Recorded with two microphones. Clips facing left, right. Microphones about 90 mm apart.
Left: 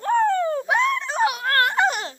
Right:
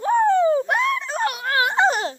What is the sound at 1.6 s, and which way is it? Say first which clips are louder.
Music: right 4 dB; 20° right (ahead or behind).